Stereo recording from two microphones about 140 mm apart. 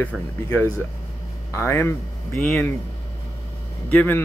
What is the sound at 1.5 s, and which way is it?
Speech, 20° left (ahead or behind).